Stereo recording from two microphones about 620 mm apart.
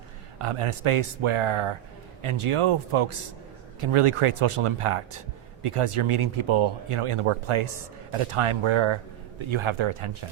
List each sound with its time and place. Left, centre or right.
0.3 s speech: right